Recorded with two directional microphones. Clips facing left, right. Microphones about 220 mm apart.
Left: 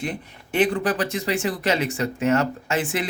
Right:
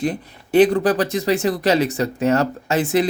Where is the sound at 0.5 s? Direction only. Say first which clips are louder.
Right 7 dB; 35° right (ahead or behind).